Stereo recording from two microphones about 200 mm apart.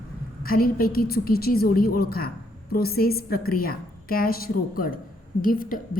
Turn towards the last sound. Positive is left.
turn(degrees=45)  # may be behind; listen again after turning